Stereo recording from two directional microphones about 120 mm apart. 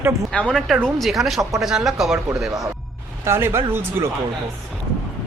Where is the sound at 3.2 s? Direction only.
20° right (ahead or behind).